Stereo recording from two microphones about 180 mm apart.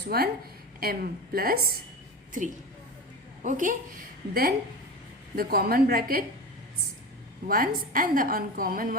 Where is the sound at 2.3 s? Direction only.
45° right (ahead or behind).